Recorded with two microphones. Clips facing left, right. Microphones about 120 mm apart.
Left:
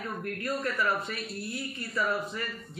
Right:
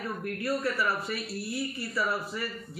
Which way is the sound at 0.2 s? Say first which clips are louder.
Right 3 dB; 10° right (ahead or behind).